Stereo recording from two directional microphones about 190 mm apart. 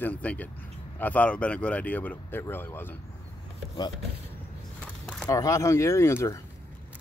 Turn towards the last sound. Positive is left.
turn(degrees=15)  # may be behind; listen again after turning